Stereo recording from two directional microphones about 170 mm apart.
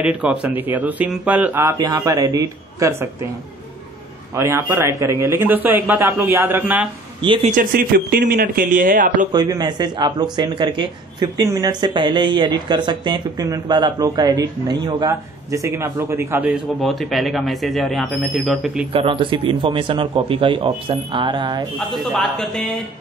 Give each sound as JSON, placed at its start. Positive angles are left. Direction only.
{"t": 0.0, "sound": "speech", "side_deg": -10}
{"t": 4.4, "sound": "speech", "side_deg": -15}
{"t": 7.2, "sound": "speech", "side_deg": -30}
{"t": 7.5, "sound": "speech", "side_deg": -60}
{"t": 9.3, "sound": "speech", "side_deg": -25}
{"t": 16.8, "sound": "speech", "side_deg": 0}
{"t": 18.9, "sound": "speech", "side_deg": -30}
{"t": 21.7, "sound": "speech", "side_deg": 5}